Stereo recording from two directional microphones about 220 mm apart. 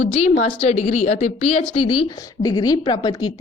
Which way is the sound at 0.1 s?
30° left (ahead or behind).